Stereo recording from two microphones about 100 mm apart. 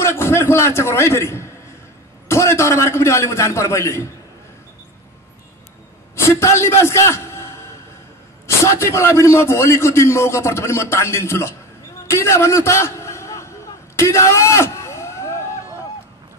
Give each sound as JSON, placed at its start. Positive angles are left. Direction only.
{"t": 0.0, "sound": "a man's voice", "side_deg": 25}
{"t": 6.4, "sound": "a man's voice", "side_deg": 30}
{"t": 13.9, "sound": "a sound", "side_deg": 30}